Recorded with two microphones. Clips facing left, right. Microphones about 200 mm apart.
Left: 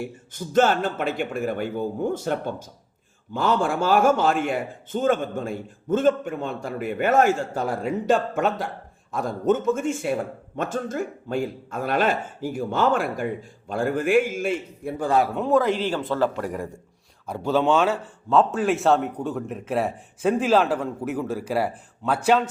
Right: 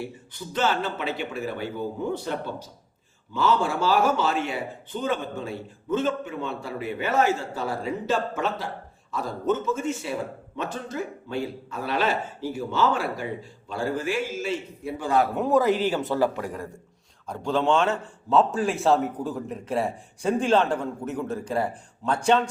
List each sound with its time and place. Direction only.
0.0 s a man's voice: 45° left (ahead or behind)
15.4 s a man's voice: 5° right (ahead or behind)
17.2 s a man's voice: 5° left (ahead or behind)